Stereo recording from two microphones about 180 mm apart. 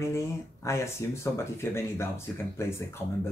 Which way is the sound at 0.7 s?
15° left (ahead or behind).